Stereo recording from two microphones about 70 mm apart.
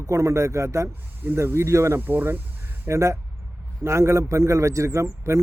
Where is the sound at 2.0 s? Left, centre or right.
Right.